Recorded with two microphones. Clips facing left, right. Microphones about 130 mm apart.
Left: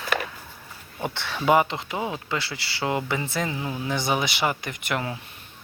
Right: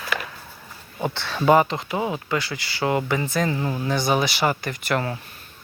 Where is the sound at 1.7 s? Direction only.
20° right (ahead or behind).